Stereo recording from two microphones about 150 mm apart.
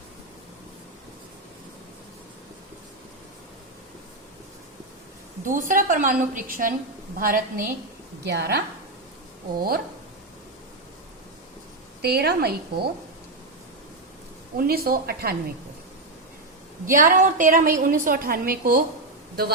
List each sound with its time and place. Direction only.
5.5 s a woman's voice: 60° right (ahead or behind)
8.4 s a woman's voice: 90° right
12.0 s a woman's voice: 90° right
14.7 s speech: 85° right
16.8 s a woman's voice: 65° right (ahead or behind)